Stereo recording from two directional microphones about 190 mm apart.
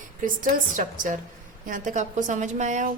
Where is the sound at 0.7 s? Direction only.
45° right (ahead or behind).